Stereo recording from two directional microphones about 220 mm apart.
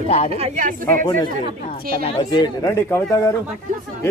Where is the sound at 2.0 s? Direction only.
20° left (ahead or behind).